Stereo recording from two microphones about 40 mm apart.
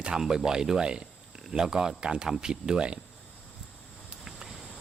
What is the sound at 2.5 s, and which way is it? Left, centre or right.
Speech, right.